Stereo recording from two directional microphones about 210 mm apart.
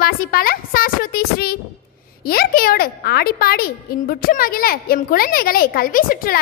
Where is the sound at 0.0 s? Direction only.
45° left (ahead or behind).